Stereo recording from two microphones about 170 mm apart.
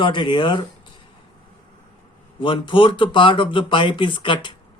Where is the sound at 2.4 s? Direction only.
30° left (ahead or behind).